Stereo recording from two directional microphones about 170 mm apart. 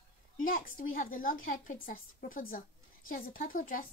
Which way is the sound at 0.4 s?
55° left (ahead or behind).